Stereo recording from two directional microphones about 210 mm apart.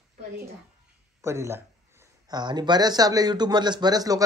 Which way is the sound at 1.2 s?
15° right (ahead or behind).